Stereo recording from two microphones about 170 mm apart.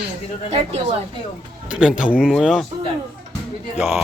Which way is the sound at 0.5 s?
35° right (ahead or behind).